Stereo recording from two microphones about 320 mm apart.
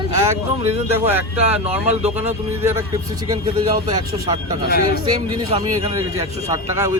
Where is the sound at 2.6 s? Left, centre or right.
Centre.